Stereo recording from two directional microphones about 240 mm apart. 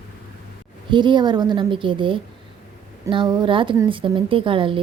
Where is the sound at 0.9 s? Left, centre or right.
Centre.